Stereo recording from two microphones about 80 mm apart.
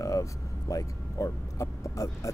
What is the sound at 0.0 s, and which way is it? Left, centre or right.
Speech, left.